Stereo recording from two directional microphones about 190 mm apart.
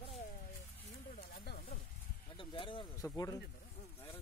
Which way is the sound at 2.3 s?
25° left (ahead or behind).